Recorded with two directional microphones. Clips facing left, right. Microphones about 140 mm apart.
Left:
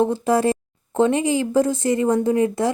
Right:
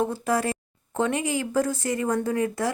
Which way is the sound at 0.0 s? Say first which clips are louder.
Left 6 dB; 25° left (ahead or behind).